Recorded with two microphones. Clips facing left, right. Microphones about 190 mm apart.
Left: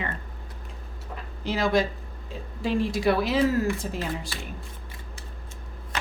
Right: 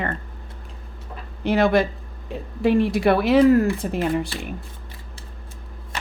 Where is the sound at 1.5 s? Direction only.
60° right (ahead or behind).